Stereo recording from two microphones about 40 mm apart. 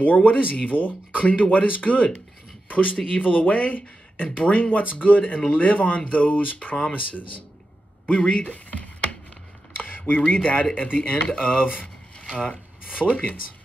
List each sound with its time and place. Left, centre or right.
0.0 s speech: left
1.2 s speech: left
9.8 s speech: left